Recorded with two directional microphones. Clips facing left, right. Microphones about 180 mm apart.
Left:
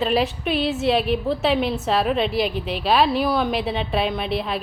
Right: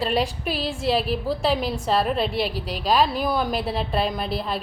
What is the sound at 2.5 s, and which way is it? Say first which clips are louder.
Speech: left 3 dB; 35° right (ahead or behind).